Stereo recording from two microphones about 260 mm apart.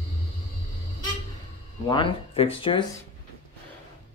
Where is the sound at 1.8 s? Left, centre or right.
Centre.